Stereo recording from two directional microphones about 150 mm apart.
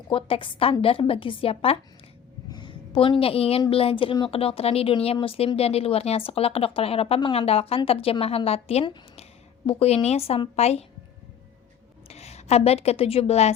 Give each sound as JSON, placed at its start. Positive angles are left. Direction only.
{"t": 0.1, "sound": "speech", "side_deg": 35}
{"t": 2.5, "sound": "a sound", "side_deg": 30}
{"t": 3.7, "sound": "a woman's voice", "side_deg": 40}
{"t": 12.0, "sound": "speech", "side_deg": 45}